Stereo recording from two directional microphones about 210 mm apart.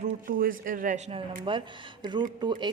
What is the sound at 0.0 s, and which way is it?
A man's voice, 40° right (ahead or behind).